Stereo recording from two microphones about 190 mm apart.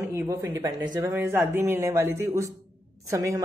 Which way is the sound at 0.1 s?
15° right (ahead or behind).